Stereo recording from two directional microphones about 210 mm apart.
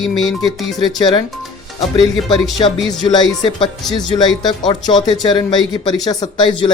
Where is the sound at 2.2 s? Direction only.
Centre (ahead or behind).